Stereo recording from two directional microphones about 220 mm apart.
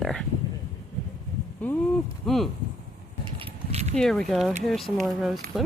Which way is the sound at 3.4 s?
30° right (ahead or behind).